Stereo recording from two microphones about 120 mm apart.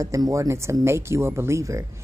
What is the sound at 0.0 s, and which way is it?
Speech, 25° right (ahead or behind).